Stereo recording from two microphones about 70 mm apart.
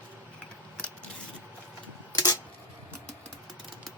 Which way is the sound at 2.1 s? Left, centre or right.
Left.